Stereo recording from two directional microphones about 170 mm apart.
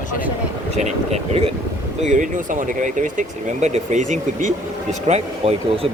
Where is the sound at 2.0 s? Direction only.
50° right (ahead or behind).